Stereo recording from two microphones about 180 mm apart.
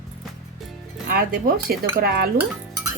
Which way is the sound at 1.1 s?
55° right (ahead or behind).